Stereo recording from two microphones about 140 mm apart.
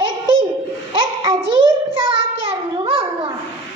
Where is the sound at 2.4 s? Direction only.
40° right (ahead or behind).